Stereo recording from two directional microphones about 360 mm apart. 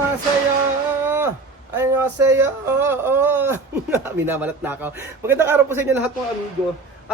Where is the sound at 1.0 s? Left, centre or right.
Centre.